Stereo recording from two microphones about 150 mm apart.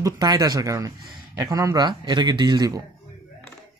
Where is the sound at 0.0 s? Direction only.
25° right (ahead or behind).